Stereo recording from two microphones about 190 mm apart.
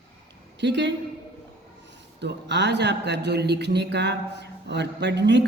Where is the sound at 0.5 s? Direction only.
65° right (ahead or behind).